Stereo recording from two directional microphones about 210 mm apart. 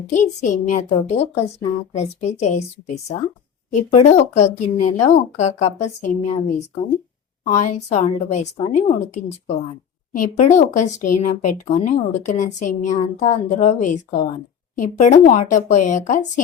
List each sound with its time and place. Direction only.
0.1 s a woman's voice: 35° left (ahead or behind)
7.5 s a woman's voice: 35° left (ahead or behind)